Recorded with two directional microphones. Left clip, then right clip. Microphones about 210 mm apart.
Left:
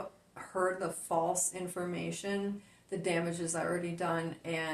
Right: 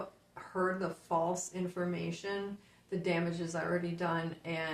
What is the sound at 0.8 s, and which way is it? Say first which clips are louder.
Speech: left 1 dB; 35° left (ahead or behind).